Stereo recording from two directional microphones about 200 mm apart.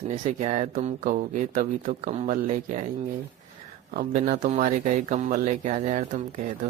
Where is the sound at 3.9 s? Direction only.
40° right (ahead or behind).